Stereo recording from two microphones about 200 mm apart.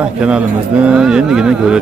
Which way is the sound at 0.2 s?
5° right (ahead or behind).